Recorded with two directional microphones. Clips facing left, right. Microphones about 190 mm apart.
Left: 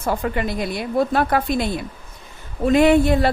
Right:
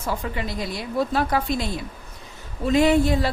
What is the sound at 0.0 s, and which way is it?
A woman's voice, 55° left (ahead or behind).